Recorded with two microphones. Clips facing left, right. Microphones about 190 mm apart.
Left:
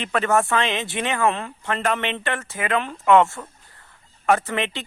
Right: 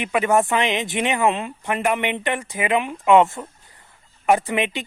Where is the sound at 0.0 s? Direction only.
10° right (ahead or behind).